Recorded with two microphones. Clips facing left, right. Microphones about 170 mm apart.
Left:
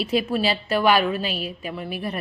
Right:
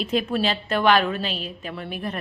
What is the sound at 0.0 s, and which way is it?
A woman's voice, 5° left (ahead or behind).